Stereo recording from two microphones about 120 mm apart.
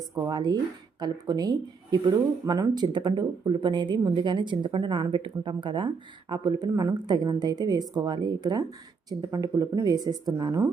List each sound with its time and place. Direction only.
0.3 s speech: 35° right (ahead or behind)